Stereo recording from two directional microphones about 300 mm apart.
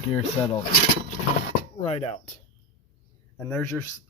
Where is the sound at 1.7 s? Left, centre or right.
Left.